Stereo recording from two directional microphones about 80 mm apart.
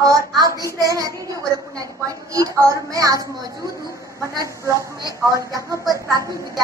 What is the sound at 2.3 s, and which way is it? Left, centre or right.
Speech, right.